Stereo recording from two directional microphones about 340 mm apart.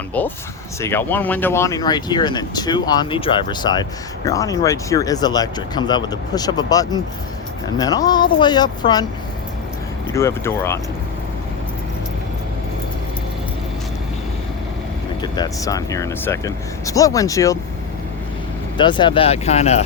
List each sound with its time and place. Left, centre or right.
0.2 s speech: centre
10.1 s speech: centre
15.2 s speech: centre
18.8 s speech: centre